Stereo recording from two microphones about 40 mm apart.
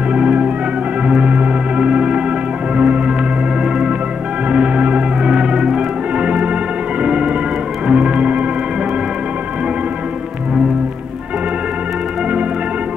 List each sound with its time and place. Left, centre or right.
0.1 s music: right
3.6 s organ: centre
4.5 s music: right